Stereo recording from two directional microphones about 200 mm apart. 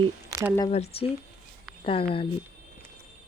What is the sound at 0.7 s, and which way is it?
Speech, 30° left (ahead or behind).